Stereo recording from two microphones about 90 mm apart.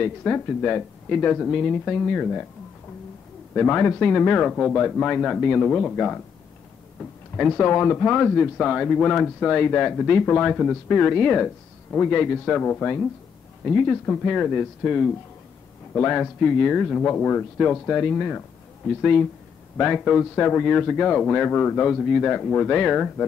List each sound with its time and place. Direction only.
0.0 s a man's voice: 15° left (ahead or behind)
3.5 s a man's voice: 20° left (ahead or behind)
7.5 s a man's voice: 20° left (ahead or behind)
10.5 s speech: 5° left (ahead or behind)
10.9 s a man's voice: 15° left (ahead or behind)
13.7 s a man's voice: 10° left (ahead or behind)
20.3 s a man's voice: 20° left (ahead or behind)